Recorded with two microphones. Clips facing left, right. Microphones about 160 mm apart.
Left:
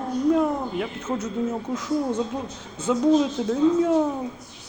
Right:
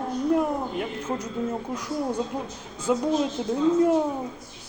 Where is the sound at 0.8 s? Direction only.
10° right (ahead or behind).